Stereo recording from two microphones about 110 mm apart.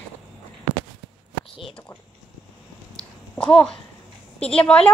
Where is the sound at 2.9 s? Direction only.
5° left (ahead or behind).